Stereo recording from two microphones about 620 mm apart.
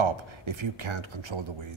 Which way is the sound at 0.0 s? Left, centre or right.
Right.